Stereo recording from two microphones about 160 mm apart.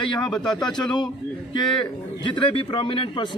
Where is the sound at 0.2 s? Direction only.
5° left (ahead or behind).